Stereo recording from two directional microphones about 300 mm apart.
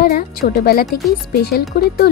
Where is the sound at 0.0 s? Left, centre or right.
Left.